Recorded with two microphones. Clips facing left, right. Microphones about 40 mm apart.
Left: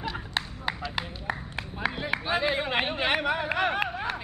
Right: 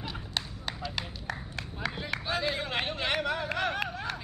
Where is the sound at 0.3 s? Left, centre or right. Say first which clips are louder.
Left 3 dB; left.